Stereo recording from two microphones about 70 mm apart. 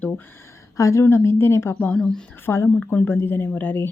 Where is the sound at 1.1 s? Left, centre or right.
Left.